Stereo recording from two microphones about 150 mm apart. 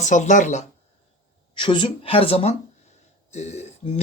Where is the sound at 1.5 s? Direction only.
35° left (ahead or behind).